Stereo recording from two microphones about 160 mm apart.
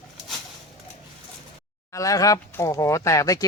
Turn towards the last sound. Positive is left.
turn(degrees=20)  # may be behind; listen again after turning